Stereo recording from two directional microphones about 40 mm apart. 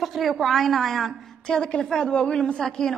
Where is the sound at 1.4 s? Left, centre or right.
Centre.